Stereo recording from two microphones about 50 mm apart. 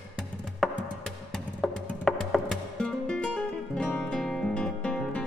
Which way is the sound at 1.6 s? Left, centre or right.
Centre.